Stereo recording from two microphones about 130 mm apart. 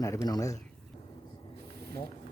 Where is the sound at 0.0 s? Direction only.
25° left (ahead or behind).